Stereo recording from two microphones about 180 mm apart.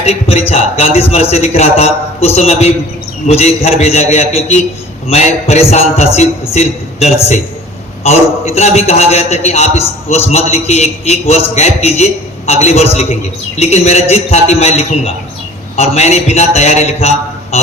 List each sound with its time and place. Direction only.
0.0 s a man's voice: 35° left (ahead or behind)